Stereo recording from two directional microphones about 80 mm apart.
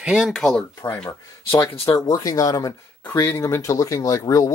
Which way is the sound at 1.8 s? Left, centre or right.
Left.